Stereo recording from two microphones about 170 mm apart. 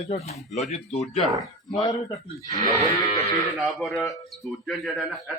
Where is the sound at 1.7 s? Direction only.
25° left (ahead or behind).